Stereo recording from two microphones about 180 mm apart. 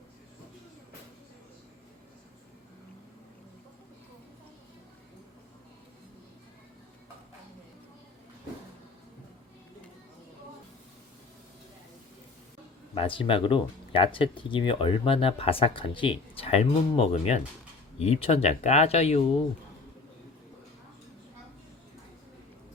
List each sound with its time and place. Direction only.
12.9 s speech: 30° left (ahead or behind)